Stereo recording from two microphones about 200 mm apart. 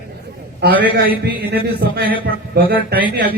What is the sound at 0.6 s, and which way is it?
Speech, 55° right (ahead or behind).